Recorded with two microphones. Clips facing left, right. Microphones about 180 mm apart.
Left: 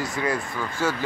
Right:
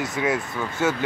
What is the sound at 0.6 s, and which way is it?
Speech, 20° right (ahead or behind).